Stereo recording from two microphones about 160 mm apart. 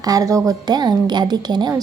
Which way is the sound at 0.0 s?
20° right (ahead or behind).